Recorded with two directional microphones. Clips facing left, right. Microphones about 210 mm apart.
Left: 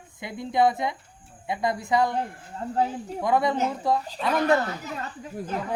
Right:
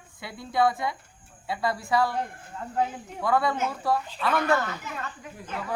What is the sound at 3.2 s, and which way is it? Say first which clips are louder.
Speech: left 2 dB; 20° left (ahead or behind).